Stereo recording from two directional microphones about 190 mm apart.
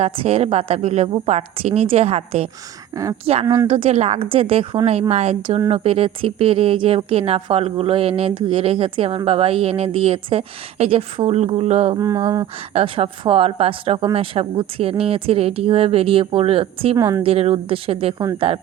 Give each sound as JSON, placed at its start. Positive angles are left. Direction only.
{"t": 0.0, "sound": "a woman's voice", "side_deg": -30}
{"t": 2.9, "sound": "a woman's voice", "side_deg": -15}
{"t": 3.7, "sound": "a woman's voice", "side_deg": -30}
{"t": 11.9, "sound": "a woman's voice", "side_deg": -20}
{"t": 17.0, "sound": "a woman's voice", "side_deg": -15}
{"t": 17.2, "sound": "a woman's voice", "side_deg": -30}